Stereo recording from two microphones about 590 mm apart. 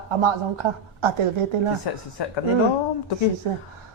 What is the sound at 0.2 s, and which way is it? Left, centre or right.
Speech, right.